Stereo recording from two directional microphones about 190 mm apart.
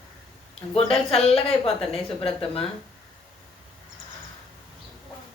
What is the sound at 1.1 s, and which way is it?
Speech, 30° left (ahead or behind).